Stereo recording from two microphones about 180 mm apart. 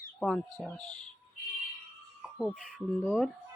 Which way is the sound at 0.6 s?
Centre (ahead or behind).